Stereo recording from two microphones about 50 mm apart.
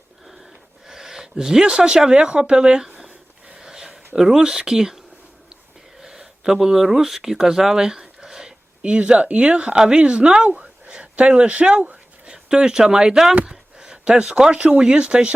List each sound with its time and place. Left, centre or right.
0.9 s speech: centre
3.5 s a sound: centre
6.0 s speech: centre
13.3 s speech: right